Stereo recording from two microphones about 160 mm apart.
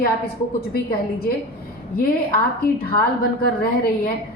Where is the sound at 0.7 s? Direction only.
75° left (ahead or behind).